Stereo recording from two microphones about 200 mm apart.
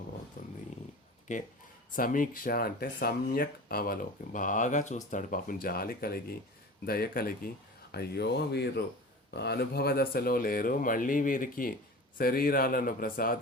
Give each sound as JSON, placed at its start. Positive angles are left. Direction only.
{"t": 0.4, "sound": "dog", "side_deg": 40}
{"t": 1.3, "sound": "speech", "side_deg": 40}